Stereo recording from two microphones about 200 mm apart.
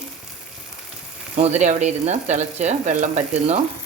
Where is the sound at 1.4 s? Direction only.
35° right (ahead or behind).